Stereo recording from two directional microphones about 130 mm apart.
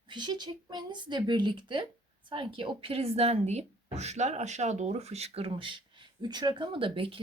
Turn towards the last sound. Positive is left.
turn(degrees=-45)  # may be behind; listen again after turning